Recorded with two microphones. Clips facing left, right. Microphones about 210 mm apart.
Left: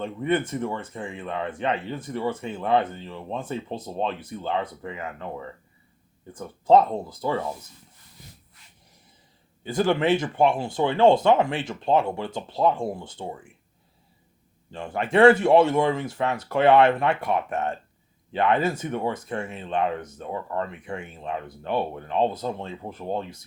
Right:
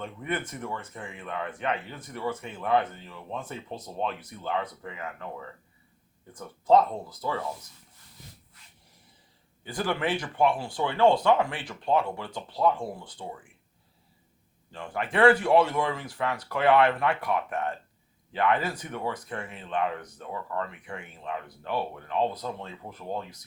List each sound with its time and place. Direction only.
0.0 s a man's voice: 30° left (ahead or behind)
6.3 s a man's voice: 30° left (ahead or behind)
9.6 s a man's voice: 25° left (ahead or behind)
14.7 s a man's voice: 25° left (ahead or behind)